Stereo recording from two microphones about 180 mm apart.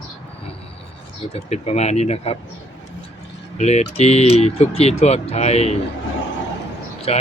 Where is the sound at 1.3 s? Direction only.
35° left (ahead or behind).